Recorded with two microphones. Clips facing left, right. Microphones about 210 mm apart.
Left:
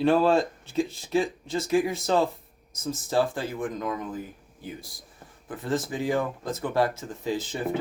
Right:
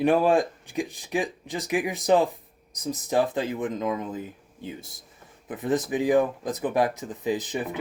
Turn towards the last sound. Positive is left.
turn(degrees=-20)  # may be behind; listen again after turning